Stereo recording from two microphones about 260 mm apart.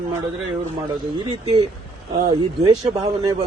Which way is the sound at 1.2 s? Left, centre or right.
Centre.